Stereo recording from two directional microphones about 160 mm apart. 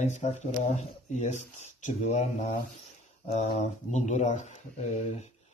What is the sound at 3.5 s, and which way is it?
Speech, 45° left (ahead or behind).